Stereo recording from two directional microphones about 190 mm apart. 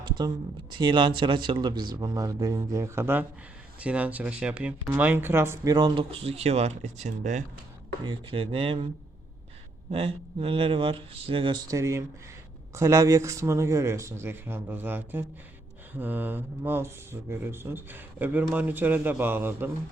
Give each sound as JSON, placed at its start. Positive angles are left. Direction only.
{"t": 0.2, "sound": "speech", "side_deg": -25}
{"t": 8.0, "sound": "speech", "side_deg": -25}
{"t": 9.9, "sound": "speech", "side_deg": -30}